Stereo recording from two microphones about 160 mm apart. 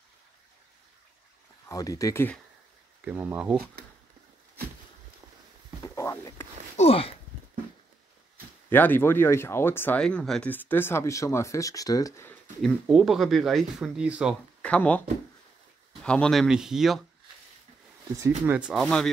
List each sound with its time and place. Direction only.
1.7 s speech: 20° left (ahead or behind)
3.1 s speech: 10° right (ahead or behind)
5.9 s a sound: 20° left (ahead or behind)
6.8 s speech: 35° left (ahead or behind)
8.6 s speech: 10° left (ahead or behind)
12.3 s speech: centre (ahead or behind)
14.6 s speech: 10° left (ahead or behind)
18.5 s speech: 5° right (ahead or behind)